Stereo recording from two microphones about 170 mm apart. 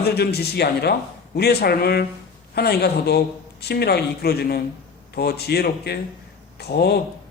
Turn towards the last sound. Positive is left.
turn(degrees=70)  # may be behind; listen again after turning